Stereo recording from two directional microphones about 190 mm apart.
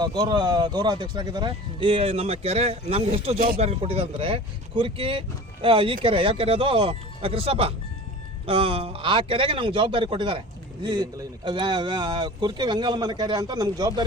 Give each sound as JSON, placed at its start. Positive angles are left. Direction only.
{"t": 0.0, "sound": "speech", "side_deg": -20}